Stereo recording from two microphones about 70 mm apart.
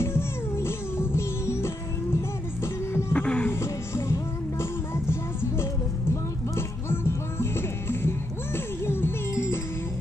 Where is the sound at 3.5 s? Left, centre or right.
Left.